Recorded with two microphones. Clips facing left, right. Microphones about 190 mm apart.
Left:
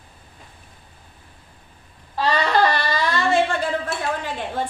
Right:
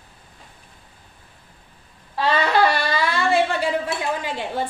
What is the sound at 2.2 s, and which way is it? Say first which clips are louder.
Speech: even; 5° right (ahead or behind).